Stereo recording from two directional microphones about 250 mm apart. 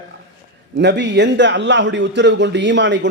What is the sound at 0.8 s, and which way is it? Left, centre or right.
A man's voice, right.